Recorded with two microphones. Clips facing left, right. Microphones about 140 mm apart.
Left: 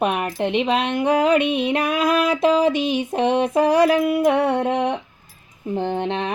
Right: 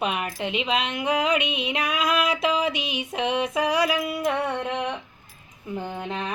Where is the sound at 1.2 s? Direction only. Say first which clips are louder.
Left 7 dB; 55° left (ahead or behind).